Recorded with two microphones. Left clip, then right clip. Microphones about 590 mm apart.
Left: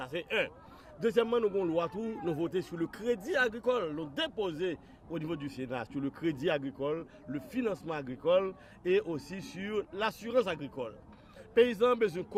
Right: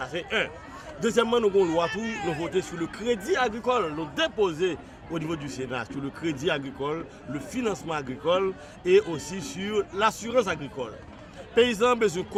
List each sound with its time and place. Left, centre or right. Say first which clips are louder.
0.0 s a man's voice: right 5 dB; left